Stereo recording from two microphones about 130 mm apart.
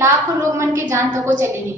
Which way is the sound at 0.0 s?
20° right (ahead or behind).